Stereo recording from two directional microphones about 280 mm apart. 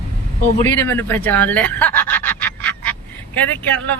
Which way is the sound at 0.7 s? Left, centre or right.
Centre.